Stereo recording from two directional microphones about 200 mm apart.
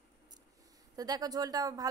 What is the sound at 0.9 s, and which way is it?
Speech, 20° right (ahead or behind).